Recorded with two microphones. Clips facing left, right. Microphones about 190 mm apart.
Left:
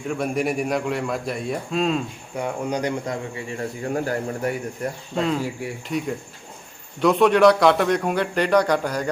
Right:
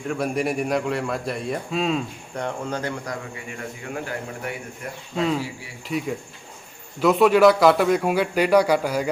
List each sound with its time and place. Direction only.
0.1 s a man's voice: centre (ahead or behind); by 4.9 s 40° left (ahead or behind)
5.1 s a man's voice: centre (ahead or behind)
7.0 s a man's voice: 5° right (ahead or behind)